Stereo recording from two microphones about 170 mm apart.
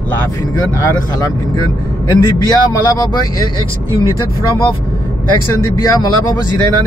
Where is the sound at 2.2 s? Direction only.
20° left (ahead or behind).